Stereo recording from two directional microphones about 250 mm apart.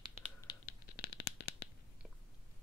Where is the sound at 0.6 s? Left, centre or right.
Left.